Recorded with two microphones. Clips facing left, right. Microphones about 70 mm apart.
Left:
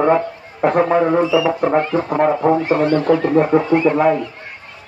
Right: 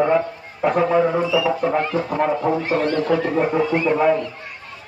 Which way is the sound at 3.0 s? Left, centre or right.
Left.